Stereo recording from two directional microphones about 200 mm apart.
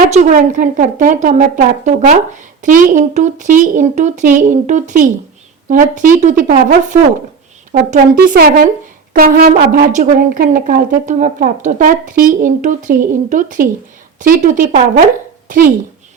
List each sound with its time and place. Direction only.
0.1 s a woman's voice: 35° right (ahead or behind)